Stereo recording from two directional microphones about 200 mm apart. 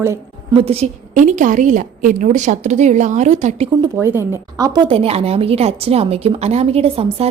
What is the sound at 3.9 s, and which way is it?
A woman's voice, 15° right (ahead or behind).